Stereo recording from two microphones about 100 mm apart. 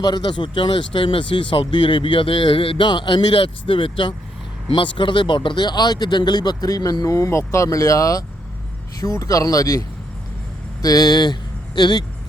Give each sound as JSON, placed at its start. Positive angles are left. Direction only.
{"t": 0.0, "sound": "speech", "side_deg": 45}
{"t": 10.8, "sound": "speech", "side_deg": 40}